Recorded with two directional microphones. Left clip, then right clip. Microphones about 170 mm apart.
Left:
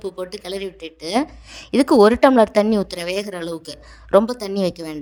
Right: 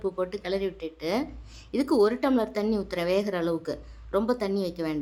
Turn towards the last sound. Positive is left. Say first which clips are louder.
# left 6 dB
turn(degrees=50)  # may be behind; listen again after turning